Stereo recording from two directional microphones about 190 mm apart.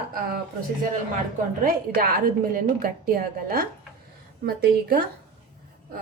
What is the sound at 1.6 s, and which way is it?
Speech, 50° right (ahead or behind).